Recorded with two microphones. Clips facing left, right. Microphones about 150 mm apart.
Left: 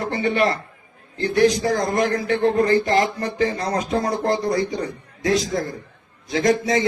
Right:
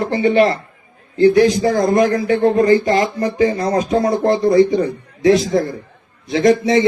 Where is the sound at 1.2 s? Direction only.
20° right (ahead or behind).